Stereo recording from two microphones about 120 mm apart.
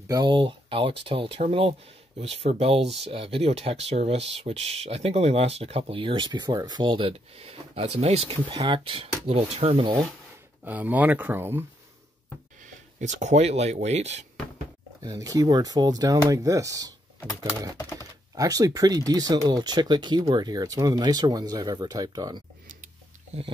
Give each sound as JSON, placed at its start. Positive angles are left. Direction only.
{"t": 0.1, "sound": "speech", "side_deg": -40}
{"t": 2.1, "sound": "speech", "side_deg": -60}
{"t": 8.5, "sound": "speech", "side_deg": -45}
{"t": 10.6, "sound": "speech", "side_deg": -15}
{"t": 12.6, "sound": "speech", "side_deg": -90}
{"t": 15.0, "sound": "speech", "side_deg": -30}
{"t": 17.7, "sound": "typing", "side_deg": 25}
{"t": 18.3, "sound": "speech", "side_deg": -30}